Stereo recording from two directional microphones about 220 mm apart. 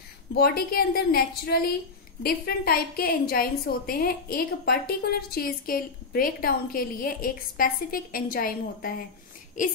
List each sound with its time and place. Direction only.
0.3 s a woman's voice: 45° left (ahead or behind)